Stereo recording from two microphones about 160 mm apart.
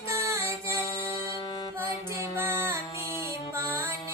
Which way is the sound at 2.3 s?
15° right (ahead or behind).